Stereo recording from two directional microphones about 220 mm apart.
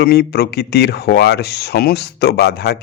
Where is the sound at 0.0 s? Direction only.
45° left (ahead or behind).